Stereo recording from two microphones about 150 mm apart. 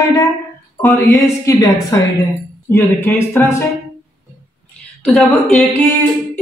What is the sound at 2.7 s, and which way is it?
Speech, 15° left (ahead or behind).